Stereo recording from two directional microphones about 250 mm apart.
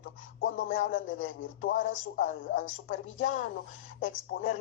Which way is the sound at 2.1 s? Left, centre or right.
Left.